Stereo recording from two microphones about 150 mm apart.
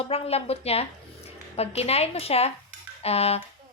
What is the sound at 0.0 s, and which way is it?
A woman's voice, 45° left (ahead or behind).